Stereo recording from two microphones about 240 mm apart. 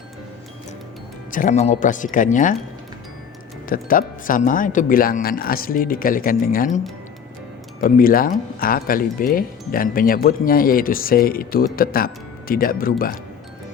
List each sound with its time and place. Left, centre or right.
1.3 s speech: left
3.7 s speech: left
7.8 s speech: left